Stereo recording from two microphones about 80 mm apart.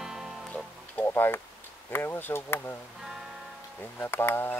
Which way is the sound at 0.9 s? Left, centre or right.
Left.